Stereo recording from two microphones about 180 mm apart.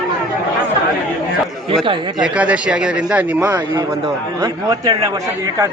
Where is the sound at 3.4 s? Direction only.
15° right (ahead or behind).